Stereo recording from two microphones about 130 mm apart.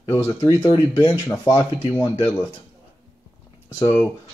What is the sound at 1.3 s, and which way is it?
Speech, 20° left (ahead or behind).